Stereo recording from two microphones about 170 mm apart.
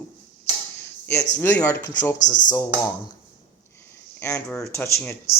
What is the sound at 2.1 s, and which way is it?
Speech, 50° left (ahead or behind).